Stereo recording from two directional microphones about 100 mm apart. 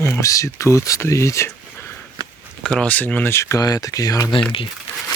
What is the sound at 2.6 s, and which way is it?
Speech, 10° left (ahead or behind).